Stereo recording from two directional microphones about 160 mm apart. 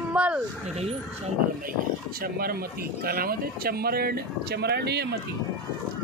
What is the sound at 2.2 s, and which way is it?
Speech, 70° right (ahead or behind).